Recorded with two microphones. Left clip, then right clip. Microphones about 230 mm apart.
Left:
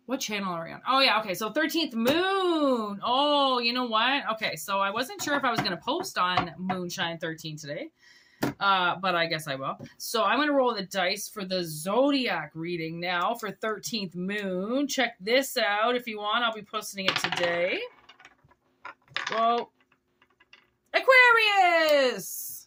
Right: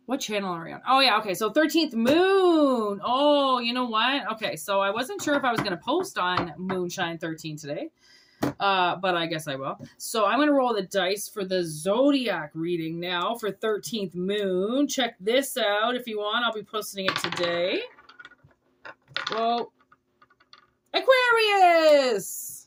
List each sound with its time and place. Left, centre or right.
0.1 s speech: centre
21.1 s speech: centre